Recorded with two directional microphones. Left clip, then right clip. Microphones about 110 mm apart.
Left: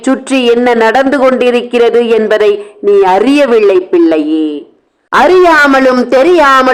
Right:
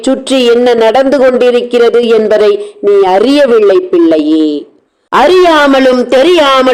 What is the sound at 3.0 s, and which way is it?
Speech, 10° right (ahead or behind).